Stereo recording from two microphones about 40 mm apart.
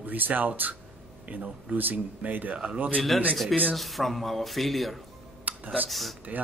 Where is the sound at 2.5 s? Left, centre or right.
Right.